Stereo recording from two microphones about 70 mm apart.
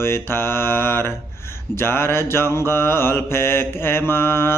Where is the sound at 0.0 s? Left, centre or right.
Left.